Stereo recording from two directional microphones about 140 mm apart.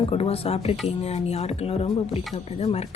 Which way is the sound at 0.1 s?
45° left (ahead or behind).